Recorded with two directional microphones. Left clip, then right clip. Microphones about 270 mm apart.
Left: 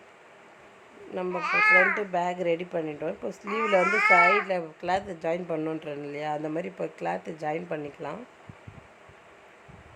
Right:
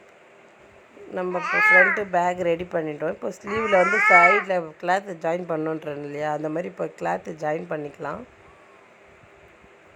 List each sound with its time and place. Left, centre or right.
1.1 s speech: centre
1.4 s speech: right
2.0 s speech: centre
3.8 s speech: right
4.1 s speech: centre